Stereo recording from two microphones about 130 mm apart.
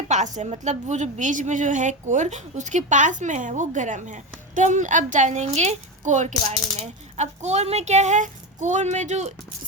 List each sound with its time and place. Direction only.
0.1 s a woman's voice: 70° right (ahead or behind)